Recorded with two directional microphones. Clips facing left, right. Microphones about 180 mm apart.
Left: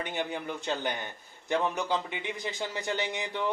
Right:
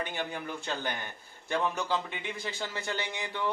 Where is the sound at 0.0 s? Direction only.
20° left (ahead or behind).